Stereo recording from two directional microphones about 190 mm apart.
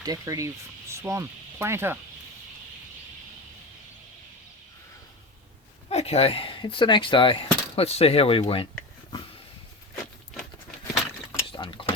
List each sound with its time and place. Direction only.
0.0 s speech: 20° right (ahead or behind)
5.9 s speech: 35° left (ahead or behind)
11.5 s cutlery: 25° left (ahead or behind)